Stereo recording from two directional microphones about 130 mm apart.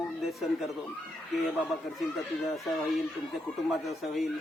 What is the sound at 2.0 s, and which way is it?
Speech, centre (ahead or behind).